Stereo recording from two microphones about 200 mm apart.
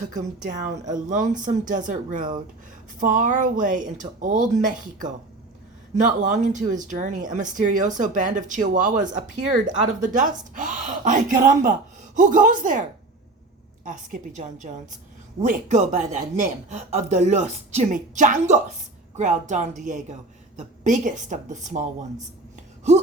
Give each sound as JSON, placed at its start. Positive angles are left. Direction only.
{"t": 0.1, "sound": "speech", "side_deg": -40}
{"t": 10.0, "sound": "speech", "side_deg": -40}
{"t": 14.1, "sound": "speech", "side_deg": -35}